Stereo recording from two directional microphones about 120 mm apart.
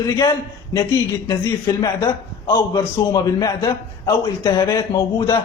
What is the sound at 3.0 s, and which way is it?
A man's voice, 30° left (ahead or behind).